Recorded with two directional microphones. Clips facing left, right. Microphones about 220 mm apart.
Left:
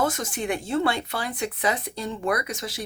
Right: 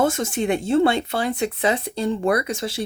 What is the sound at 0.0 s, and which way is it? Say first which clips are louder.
Speech: right 5 dB; 25° right (ahead or behind).